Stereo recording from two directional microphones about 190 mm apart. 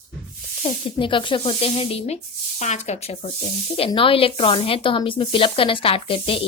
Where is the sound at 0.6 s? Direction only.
25° left (ahead or behind).